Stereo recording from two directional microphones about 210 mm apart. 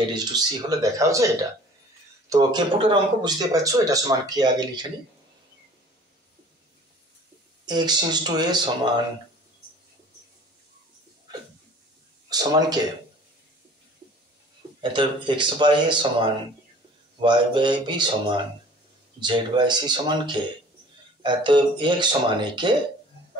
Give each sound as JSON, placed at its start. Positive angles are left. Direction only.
{"t": 0.1, "sound": "speech", "side_deg": -20}
{"t": 2.2, "sound": "speech", "side_deg": -20}
{"t": 7.6, "sound": "speech", "side_deg": -20}
{"t": 12.3, "sound": "speech", "side_deg": -20}
{"t": 14.8, "sound": "speech", "side_deg": -25}